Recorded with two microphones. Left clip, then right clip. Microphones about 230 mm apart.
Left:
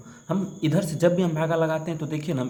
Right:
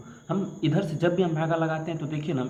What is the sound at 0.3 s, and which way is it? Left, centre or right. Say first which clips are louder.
A man's voice: left 1 dB; left.